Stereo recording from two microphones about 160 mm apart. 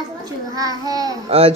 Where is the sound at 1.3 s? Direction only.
40° right (ahead or behind).